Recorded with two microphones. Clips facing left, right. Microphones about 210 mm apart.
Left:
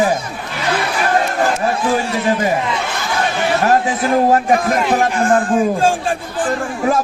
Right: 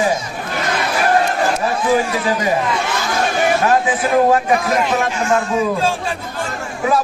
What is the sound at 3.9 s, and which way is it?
Speech, 40° left (ahead or behind).